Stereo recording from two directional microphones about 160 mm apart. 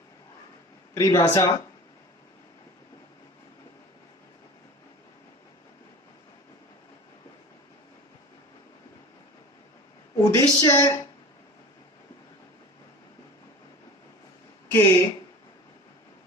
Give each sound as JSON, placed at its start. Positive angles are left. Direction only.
{"t": 0.9, "sound": "speech", "side_deg": 20}
{"t": 10.2, "sound": "a woman's voice", "side_deg": 20}
{"t": 14.7, "sound": "speech", "side_deg": 15}